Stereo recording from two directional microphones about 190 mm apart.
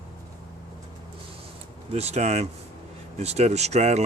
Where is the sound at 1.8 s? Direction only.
35° right (ahead or behind).